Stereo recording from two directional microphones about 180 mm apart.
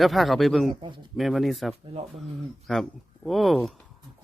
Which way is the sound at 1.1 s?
Centre (ahead or behind).